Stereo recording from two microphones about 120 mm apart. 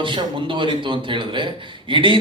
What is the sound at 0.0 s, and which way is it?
Speech, 45° right (ahead or behind).